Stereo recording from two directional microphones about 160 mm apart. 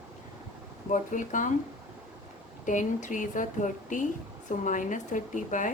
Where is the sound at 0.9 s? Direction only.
55° left (ahead or behind).